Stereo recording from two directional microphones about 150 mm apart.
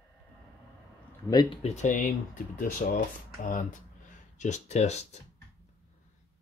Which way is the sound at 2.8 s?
70° left (ahead or behind).